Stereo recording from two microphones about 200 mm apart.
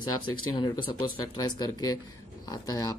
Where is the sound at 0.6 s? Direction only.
25° left (ahead or behind).